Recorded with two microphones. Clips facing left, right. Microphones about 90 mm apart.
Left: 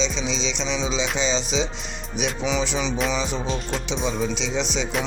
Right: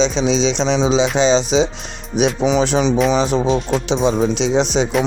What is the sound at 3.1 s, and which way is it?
Speech, 70° right (ahead or behind).